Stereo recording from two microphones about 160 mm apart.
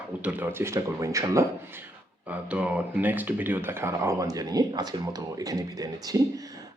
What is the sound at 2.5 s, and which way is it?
Speech, 10° right (ahead or behind).